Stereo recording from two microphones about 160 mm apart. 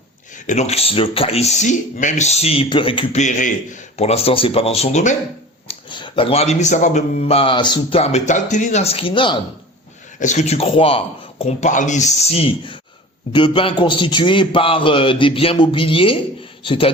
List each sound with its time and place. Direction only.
0.4 s speech: 45° left (ahead or behind)
3.9 s speech: 40° left (ahead or behind)
5.6 s speech: 30° left (ahead or behind)
10.2 s speech: 50° left (ahead or behind); by 16.9 s 35° left (ahead or behind)